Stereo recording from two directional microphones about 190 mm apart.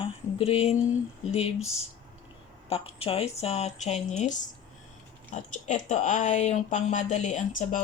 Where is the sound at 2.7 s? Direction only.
30° left (ahead or behind).